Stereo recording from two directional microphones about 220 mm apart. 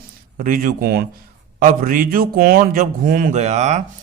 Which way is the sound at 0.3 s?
40° right (ahead or behind).